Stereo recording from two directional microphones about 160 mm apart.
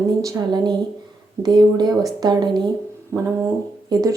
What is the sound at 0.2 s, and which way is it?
Speech, 20° right (ahead or behind).